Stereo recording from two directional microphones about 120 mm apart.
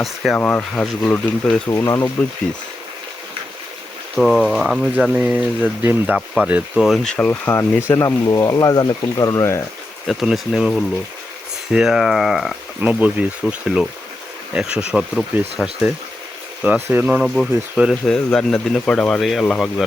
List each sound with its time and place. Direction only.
0.0 s speech: centre (ahead or behind)
0.3 s speech: 10° left (ahead or behind)
1.7 s speech: 25° left (ahead or behind)
4.2 s speech: centre (ahead or behind)
6.1 s speech: centre (ahead or behind); by 9.6 s 25° left (ahead or behind)
10.1 s speech: centre (ahead or behind)
11.7 s speech: 5° right (ahead or behind)
12.8 s speech: 10° right (ahead or behind)
16.9 s speech: 15° right (ahead or behind)
17.2 s speech: centre (ahead or behind)